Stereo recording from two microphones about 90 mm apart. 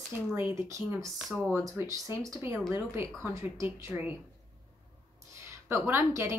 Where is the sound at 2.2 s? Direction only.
35° right (ahead or behind).